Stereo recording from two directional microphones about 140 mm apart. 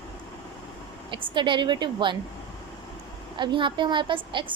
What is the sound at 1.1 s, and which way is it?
A woman's voice, 35° right (ahead or behind).